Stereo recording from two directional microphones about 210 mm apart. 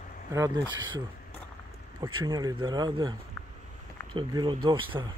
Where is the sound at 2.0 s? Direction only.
20° right (ahead or behind).